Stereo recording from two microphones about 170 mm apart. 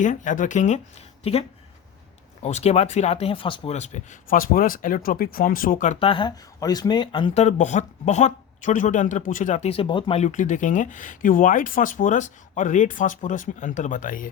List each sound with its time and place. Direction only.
0.0 s speech: 50° left (ahead or behind)
6.0 s speech: 30° left (ahead or behind); by 14.3 s 50° left (ahead or behind)